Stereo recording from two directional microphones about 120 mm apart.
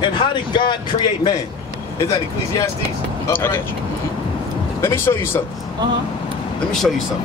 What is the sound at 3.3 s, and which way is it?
Speech, 20° left (ahead or behind).